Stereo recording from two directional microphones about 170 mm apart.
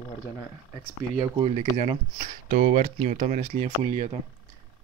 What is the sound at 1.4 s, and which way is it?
Speech, 35° right (ahead or behind).